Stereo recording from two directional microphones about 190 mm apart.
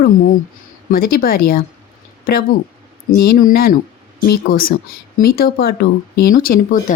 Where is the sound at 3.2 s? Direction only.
50° left (ahead or behind).